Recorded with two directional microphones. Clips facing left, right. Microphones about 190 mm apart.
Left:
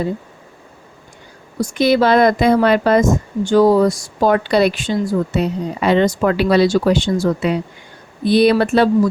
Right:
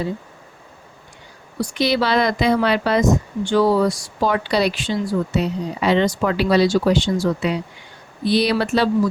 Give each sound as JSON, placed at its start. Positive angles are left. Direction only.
{"t": 1.5, "sound": "speech", "side_deg": 45}